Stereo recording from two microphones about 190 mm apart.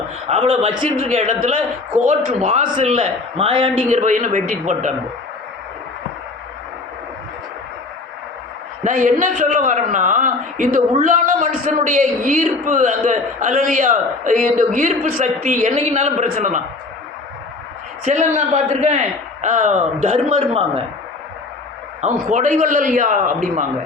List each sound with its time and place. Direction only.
0.3 s a man's voice: 30° right (ahead or behind)
3.8 s a man's voice: 40° right (ahead or behind)
8.8 s a man's voice: 40° right (ahead or behind)
18.0 s a man's voice: 35° right (ahead or behind)
22.0 s a man's voice: 40° right (ahead or behind)